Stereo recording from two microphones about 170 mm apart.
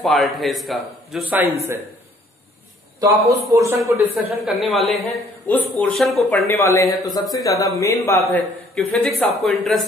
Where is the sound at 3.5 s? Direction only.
15° right (ahead or behind).